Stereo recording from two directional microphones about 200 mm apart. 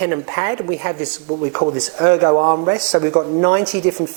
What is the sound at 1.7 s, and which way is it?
Speech, 10° right (ahead or behind).